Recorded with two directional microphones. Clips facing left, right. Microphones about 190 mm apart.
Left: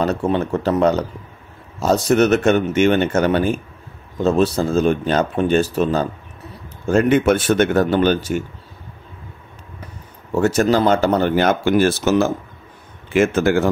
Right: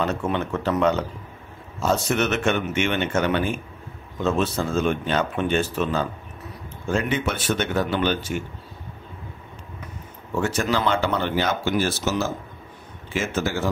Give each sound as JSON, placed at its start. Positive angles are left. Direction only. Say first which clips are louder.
{"t": 0.0, "sound": "a man's voice", "louder": "left 6 dB", "side_deg": 35}
{"t": 10.3, "sound": "speech", "louder": "left 8 dB", "side_deg": 40}